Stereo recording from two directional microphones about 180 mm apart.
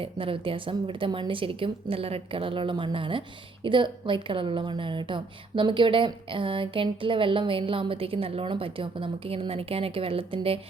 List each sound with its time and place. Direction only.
0.0 s a woman's voice: 30° right (ahead or behind)